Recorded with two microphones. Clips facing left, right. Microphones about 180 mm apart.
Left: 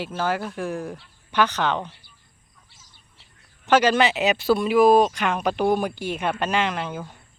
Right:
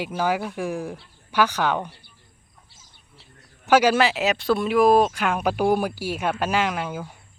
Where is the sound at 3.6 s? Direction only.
10° right (ahead or behind).